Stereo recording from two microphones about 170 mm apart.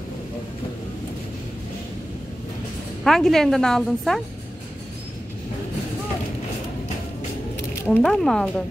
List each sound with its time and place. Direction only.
3.0 s a woman's voice: centre (ahead or behind)
7.7 s a sound: 15° left (ahead or behind)
8.0 s a woman's voice: 5° left (ahead or behind)